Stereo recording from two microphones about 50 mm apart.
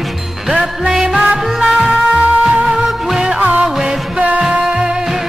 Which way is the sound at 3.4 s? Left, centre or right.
Right.